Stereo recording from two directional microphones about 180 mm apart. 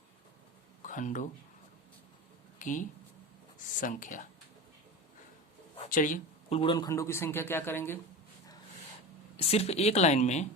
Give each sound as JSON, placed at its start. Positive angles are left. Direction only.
{"t": 0.8, "sound": "speech", "side_deg": 45}
{"t": 2.6, "sound": "speech", "side_deg": 45}
{"t": 5.9, "sound": "speech", "side_deg": 45}
{"t": 6.6, "sound": "a man's voice", "side_deg": 25}
{"t": 9.4, "sound": "a woman's voice", "side_deg": 35}